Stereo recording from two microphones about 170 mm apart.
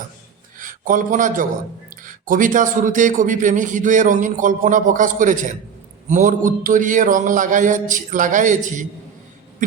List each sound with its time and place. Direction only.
0.6 s a man's voice: 50° right (ahead or behind)